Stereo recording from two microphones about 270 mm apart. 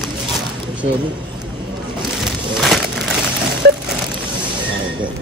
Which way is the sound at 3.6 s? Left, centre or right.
Right.